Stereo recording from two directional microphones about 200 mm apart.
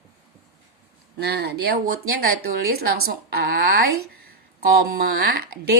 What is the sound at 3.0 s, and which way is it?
A woman's voice, 50° right (ahead or behind).